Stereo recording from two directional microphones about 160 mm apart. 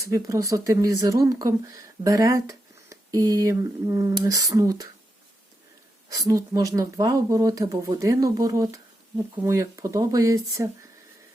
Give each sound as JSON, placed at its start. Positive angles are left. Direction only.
{"t": 0.1, "sound": "speech", "side_deg": -20}
{"t": 6.1, "sound": "speech", "side_deg": -20}